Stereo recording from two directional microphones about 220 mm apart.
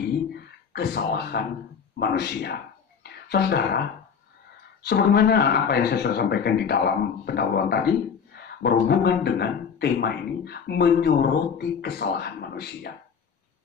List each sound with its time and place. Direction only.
0.7 s speech: 50° left (ahead or behind)
4.8 s speech: 45° left (ahead or behind)